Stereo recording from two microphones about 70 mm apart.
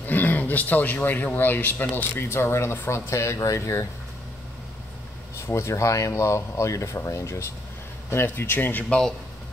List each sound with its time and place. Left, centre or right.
0.0 s speech: left
2.2 s speech: left
5.5 s speech: left